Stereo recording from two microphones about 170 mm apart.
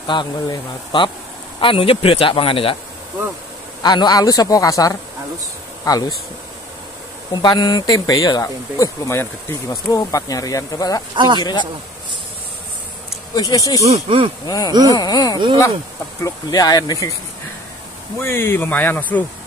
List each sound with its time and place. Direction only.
0.0 s speech: 25° left (ahead or behind)
3.8 s speech: 25° left (ahead or behind)
7.4 s speech: 25° left (ahead or behind)
11.1 s speech: 25° right (ahead or behind)
13.3 s speech: 20° left (ahead or behind)
13.8 s speech: 35° right (ahead or behind)
14.4 s speech: 20° left (ahead or behind)
18.2 s speech: 15° left (ahead or behind)